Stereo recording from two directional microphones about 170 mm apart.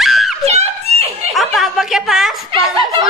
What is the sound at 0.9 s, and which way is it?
Snicker, 35° right (ahead or behind).